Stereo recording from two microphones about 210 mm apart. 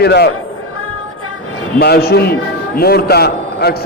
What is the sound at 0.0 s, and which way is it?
Speech, 50° left (ahead or behind).